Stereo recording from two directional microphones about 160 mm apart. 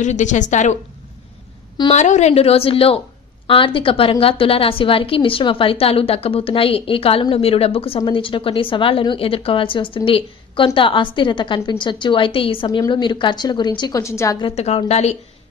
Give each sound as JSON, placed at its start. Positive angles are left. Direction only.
{"t": 0.0, "sound": "a woman's voice", "side_deg": 50}
{"t": 1.9, "sound": "a woman's voice", "side_deg": 45}
{"t": 14.4, "sound": "a woman's voice", "side_deg": 40}